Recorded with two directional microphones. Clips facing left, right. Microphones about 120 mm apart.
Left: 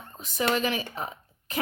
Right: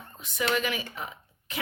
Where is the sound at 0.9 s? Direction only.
35° left (ahead or behind).